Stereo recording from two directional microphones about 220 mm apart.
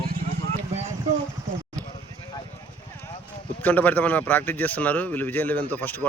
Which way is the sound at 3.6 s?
10° left (ahead or behind).